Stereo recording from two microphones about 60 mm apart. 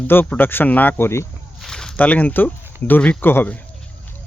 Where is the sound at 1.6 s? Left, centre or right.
Centre.